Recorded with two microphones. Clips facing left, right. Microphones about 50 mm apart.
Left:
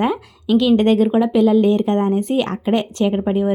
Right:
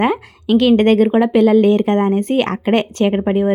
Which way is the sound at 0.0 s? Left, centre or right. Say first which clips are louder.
Right 3 dB; right.